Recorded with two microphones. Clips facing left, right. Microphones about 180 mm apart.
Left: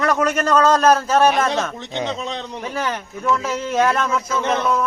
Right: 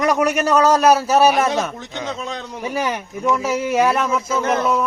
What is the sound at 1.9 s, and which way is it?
Speech, 20° left (ahead or behind).